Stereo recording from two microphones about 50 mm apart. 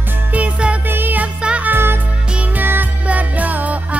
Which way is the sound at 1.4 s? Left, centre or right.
Right.